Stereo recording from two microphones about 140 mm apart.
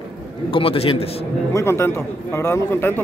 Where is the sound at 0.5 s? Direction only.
40° left (ahead or behind).